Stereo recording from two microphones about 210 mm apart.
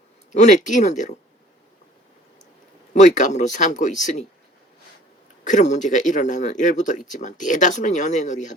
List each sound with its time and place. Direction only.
0.3 s speech: 35° left (ahead or behind)
2.9 s speech: 35° left (ahead or behind)
5.5 s speech: 35° left (ahead or behind)